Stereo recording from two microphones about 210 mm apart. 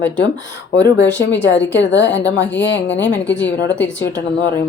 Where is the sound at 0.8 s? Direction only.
55° left (ahead or behind).